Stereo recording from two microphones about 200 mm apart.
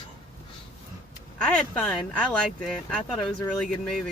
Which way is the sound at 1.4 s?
5° left (ahead or behind).